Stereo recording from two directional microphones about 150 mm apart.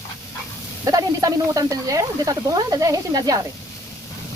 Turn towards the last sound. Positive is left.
turn(degrees=-25)  # may be behind; listen again after turning